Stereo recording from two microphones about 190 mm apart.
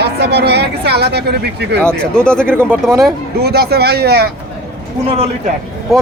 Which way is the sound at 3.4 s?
55° right (ahead or behind).